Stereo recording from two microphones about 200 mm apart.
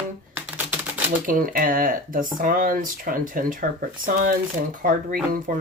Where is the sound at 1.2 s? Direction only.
45° right (ahead or behind).